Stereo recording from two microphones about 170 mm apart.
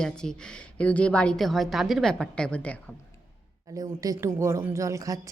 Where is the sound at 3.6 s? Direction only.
20° right (ahead or behind).